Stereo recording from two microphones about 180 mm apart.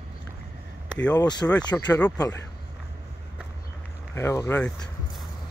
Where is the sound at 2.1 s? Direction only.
20° left (ahead or behind).